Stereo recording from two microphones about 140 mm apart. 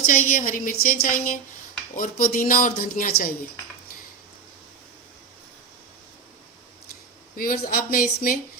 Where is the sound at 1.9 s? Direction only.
80° left.